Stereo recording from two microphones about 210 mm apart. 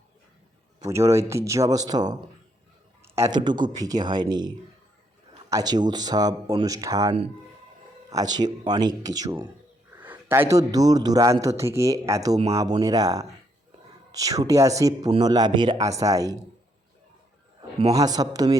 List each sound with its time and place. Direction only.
0.9 s a man's voice: 15° right (ahead or behind)
17.6 s a man's voice: 25° right (ahead or behind)